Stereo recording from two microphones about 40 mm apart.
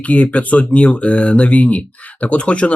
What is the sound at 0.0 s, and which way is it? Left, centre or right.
Speech, left.